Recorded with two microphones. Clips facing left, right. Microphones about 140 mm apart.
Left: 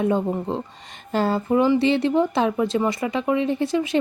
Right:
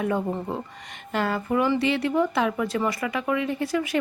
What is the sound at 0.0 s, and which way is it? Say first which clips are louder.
A woman's voice: left 4 dB; 25° left (ahead or behind).